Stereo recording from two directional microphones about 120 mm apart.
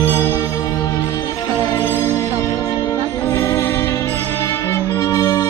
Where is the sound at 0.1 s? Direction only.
25° left (ahead or behind).